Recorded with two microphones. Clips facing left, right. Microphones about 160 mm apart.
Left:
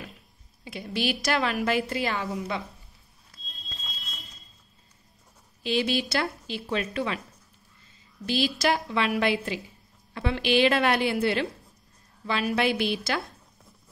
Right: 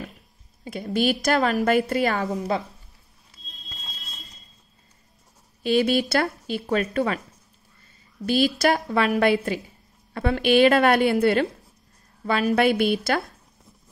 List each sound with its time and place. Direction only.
0.7 s a woman's voice: 45° right (ahead or behind)
5.6 s a woman's voice: 50° right (ahead or behind)
8.3 s a woman's voice: 50° right (ahead or behind)